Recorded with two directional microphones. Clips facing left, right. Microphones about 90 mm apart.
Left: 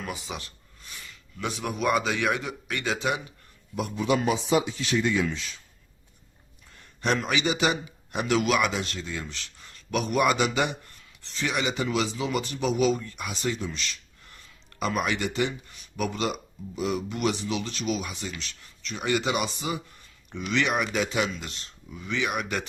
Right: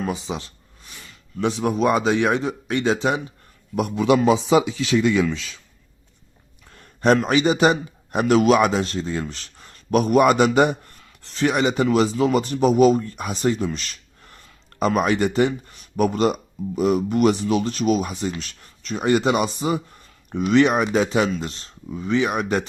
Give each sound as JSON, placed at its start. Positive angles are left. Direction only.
{"t": 0.0, "sound": "speech", "side_deg": -25}
{"t": 3.8, "sound": "speech", "side_deg": -75}
{"t": 7.0, "sound": "a man's voice", "side_deg": -40}